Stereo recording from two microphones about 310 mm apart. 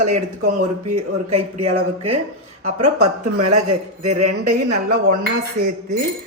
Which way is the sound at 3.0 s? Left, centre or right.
Right.